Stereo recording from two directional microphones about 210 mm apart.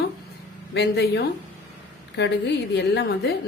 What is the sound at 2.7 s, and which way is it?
Speech, 55° left (ahead or behind).